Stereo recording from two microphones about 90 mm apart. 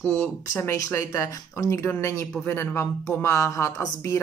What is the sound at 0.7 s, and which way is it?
A woman's voice, 35° left (ahead or behind).